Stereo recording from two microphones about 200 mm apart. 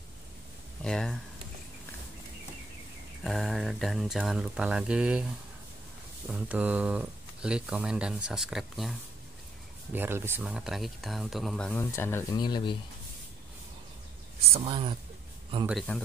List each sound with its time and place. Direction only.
0.8 s speech: 5° left (ahead or behind)
3.3 s speech: centre (ahead or behind)
6.2 s speech: 5° right (ahead or behind)
9.9 s speech: 10° right (ahead or behind); by 12.7 s 20° left (ahead or behind)
14.5 s speech: 25° right (ahead or behind)
15.9 s speech: 10° left (ahead or behind)